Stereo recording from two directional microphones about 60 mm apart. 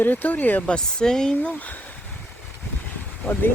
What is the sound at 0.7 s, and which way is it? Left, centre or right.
Speech, centre.